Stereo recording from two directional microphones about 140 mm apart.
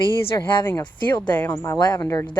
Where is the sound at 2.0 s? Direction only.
20° left (ahead or behind).